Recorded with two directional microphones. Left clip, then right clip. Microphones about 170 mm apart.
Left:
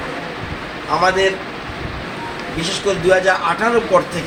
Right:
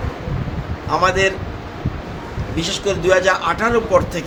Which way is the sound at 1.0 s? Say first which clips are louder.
Left 1 dB; 30° right (ahead or behind).